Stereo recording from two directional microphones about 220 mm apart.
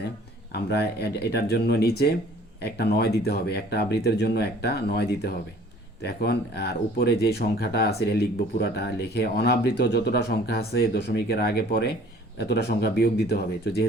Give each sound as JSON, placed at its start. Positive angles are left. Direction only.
{"t": 0.5, "sound": "speech", "side_deg": 45}